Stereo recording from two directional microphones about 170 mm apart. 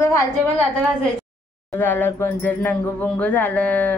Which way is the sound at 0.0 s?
20° left (ahead or behind).